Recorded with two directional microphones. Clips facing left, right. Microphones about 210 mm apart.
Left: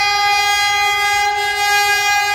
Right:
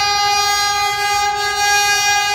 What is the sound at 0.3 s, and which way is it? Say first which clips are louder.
Train: even; 10° left (ahead or behind).